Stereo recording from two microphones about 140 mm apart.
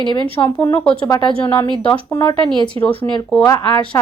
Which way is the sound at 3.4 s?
25° left (ahead or behind).